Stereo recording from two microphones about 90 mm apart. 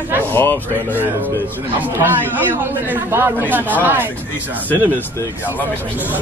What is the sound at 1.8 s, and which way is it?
Speech, 20° right (ahead or behind).